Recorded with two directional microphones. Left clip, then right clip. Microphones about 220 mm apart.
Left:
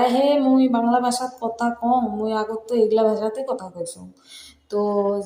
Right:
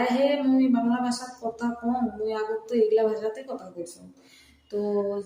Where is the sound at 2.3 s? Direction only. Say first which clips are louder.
Left 4 dB; 25° left (ahead or behind).